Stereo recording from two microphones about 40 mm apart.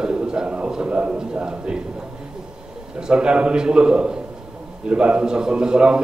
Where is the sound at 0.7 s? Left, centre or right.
Right.